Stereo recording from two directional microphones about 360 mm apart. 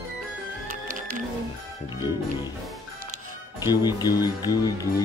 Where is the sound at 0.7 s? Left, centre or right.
Right.